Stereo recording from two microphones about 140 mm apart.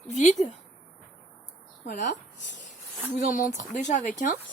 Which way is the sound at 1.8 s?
60° left (ahead or behind).